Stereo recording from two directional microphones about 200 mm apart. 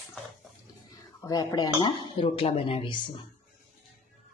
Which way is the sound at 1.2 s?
20° left (ahead or behind).